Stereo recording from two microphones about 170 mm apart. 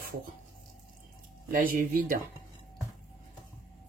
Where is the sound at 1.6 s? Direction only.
55° right (ahead or behind).